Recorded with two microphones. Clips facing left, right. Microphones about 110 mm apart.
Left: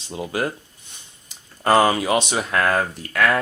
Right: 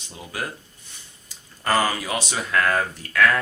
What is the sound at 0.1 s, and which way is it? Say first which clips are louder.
Speech: left 7 dB; 25° left (ahead or behind).